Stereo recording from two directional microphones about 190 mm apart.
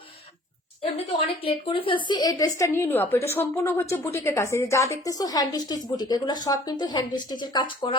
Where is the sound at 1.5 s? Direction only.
30° left (ahead or behind).